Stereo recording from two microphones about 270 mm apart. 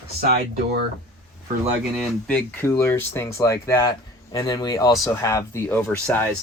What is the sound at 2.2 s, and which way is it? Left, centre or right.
Speech, centre.